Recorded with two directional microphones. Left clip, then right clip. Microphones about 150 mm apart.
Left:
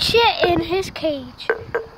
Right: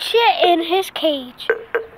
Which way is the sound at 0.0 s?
20° left (ahead or behind).